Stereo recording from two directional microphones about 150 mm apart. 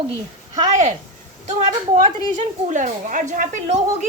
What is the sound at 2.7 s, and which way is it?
A woman's voice, 55° right (ahead or behind).